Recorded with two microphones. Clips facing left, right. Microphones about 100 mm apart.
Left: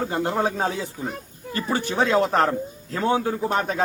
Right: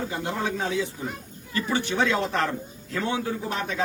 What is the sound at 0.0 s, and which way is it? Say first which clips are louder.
Speech: left 5 dB; 45° left (ahead or behind).